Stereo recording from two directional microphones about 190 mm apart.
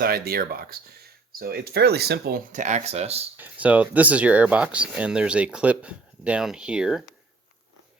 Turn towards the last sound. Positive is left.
turn(degrees=-5)  # may be behind; listen again after turning